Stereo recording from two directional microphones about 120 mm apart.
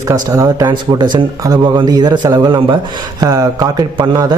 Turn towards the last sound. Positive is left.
turn(degrees=-35)  # may be behind; listen again after turning